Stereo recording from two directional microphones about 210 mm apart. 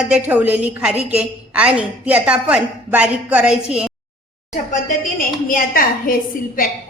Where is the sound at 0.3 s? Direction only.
5° right (ahead or behind).